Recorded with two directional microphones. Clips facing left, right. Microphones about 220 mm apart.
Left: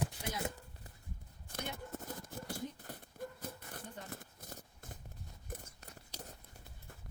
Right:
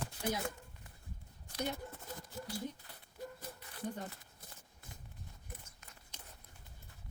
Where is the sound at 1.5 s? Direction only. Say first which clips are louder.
Right 3 dB; 50° left (ahead or behind).